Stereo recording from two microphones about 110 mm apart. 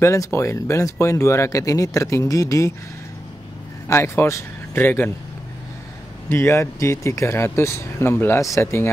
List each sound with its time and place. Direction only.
0.0 s speech: 25° left (ahead or behind)
3.8 s speech: 25° left (ahead or behind)
6.2 s speech: 25° left (ahead or behind)